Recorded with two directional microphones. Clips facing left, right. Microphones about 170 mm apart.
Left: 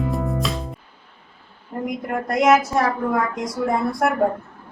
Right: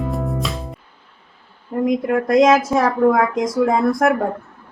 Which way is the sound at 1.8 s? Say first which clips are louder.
Right 8 dB; 90° right.